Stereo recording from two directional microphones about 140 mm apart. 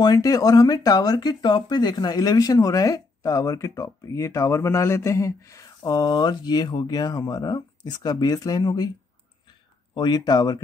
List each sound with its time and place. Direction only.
0.0 s speech: 25° left (ahead or behind)
9.9 s speech: 30° left (ahead or behind)